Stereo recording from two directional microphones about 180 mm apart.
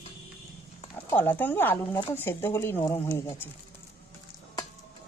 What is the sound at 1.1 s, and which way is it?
Speech, 10° left (ahead or behind).